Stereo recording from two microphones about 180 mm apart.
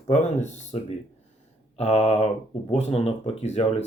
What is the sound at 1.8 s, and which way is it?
Speech, 35° left (ahead or behind).